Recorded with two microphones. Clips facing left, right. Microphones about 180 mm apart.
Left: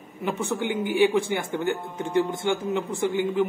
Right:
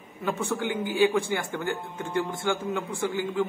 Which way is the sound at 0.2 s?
20° left (ahead or behind).